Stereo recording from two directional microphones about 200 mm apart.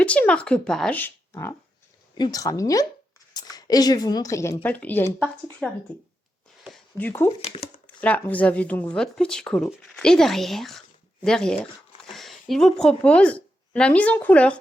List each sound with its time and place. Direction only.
0.0 s a woman's voice: 5° left (ahead or behind)